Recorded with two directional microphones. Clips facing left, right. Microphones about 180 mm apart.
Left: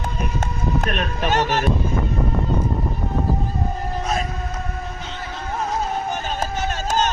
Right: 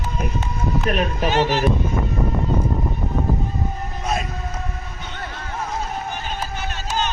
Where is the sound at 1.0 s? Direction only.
10° right (ahead or behind).